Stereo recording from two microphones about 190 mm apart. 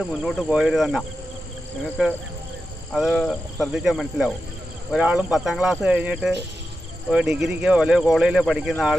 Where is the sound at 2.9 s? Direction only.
Centre (ahead or behind).